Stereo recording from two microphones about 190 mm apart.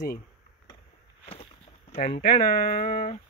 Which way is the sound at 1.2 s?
30° left (ahead or behind).